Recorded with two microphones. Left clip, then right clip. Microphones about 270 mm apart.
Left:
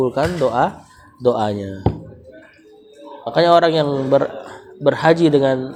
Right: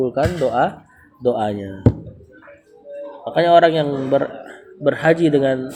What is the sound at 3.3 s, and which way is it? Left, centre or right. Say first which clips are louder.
A man's voice: even; centre.